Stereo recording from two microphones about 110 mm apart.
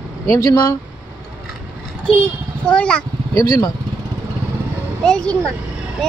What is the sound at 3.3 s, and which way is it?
Speech, 35° left (ahead or behind).